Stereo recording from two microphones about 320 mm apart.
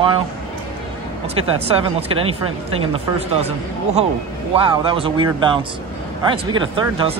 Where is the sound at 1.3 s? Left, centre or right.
Centre.